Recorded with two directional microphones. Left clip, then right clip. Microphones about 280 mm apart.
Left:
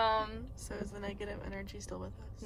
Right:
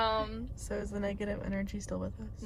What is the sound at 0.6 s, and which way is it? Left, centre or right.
A woman's voice, centre.